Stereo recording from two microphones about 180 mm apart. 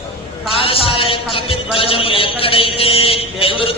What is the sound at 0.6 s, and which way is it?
A man's voice, 30° left (ahead or behind).